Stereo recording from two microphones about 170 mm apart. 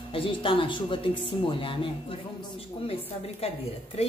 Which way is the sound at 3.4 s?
35° left (ahead or behind).